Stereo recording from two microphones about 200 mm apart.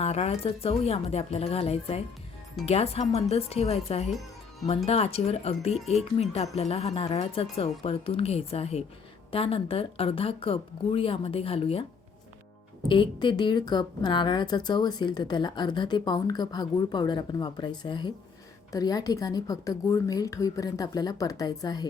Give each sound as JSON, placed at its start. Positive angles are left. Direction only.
{"t": 0.0, "sound": "a woman's voice", "side_deg": 35}
{"t": 12.9, "sound": "a woman's voice", "side_deg": 25}